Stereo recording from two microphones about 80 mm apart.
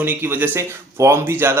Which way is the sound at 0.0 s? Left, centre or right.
Right.